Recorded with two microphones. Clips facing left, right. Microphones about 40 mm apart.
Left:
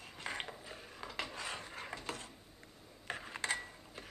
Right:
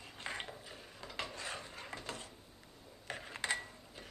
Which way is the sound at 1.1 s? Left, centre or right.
Centre.